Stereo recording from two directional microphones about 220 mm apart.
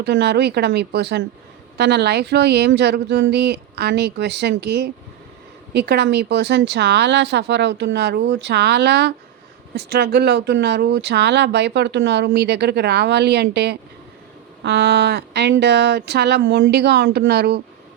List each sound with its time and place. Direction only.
0.0 s speech: 50° right (ahead or behind)